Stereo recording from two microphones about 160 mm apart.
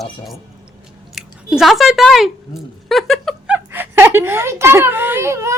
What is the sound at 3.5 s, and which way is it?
A woman's voice, 10° right (ahead or behind).